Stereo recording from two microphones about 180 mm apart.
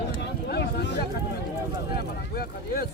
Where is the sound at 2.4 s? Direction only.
55° left (ahead or behind).